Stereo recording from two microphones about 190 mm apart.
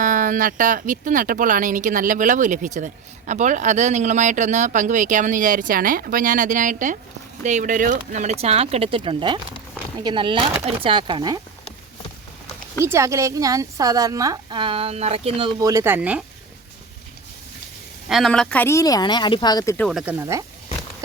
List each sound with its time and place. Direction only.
0.0 s speech: 45° right (ahead or behind); by 11.3 s 25° right (ahead or behind)
12.8 s a woman's voice: 15° right (ahead or behind)
18.1 s speech: centre (ahead or behind)
19.9 s speech: 5° right (ahead or behind)
20.1 s a woman's voice: 15° right (ahead or behind)